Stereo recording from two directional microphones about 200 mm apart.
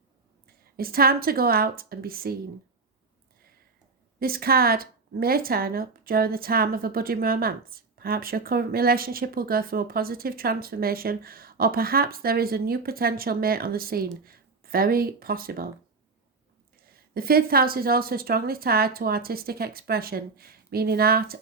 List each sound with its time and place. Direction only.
0.4 s speech: 50° right (ahead or behind)
4.2 s speech: 50° right (ahead or behind)
16.7 s speech: 50° right (ahead or behind)